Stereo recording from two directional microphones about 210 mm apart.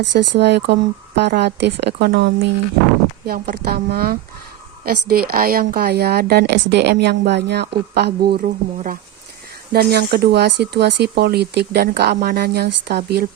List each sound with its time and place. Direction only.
0.0 s a woman's voice: 55° right (ahead or behind)